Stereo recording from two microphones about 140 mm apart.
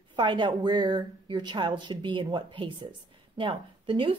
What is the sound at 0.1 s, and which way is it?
A woman's voice, 35° right (ahead or behind).